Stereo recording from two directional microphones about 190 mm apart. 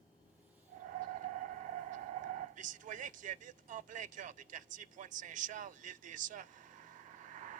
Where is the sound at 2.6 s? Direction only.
40° right (ahead or behind).